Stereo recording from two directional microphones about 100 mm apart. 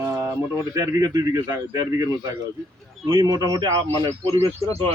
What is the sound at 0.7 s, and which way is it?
Speech, 35° right (ahead or behind).